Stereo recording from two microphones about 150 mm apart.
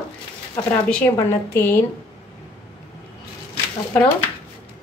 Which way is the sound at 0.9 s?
10° left (ahead or behind).